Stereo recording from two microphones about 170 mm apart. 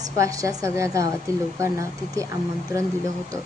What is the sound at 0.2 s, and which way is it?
A woman's voice, 20° right (ahead or behind).